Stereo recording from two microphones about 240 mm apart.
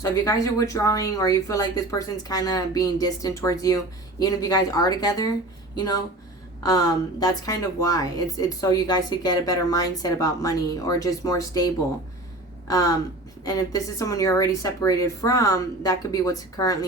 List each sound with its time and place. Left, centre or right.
0.0 s a woman's voice: centre